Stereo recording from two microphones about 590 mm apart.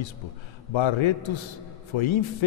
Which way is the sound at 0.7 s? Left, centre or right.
Left.